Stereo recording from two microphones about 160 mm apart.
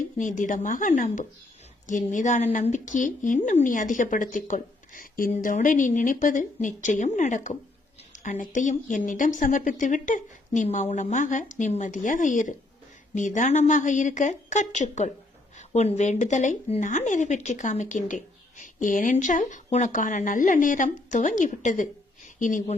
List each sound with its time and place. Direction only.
0.2 s speech: 55° left (ahead or behind)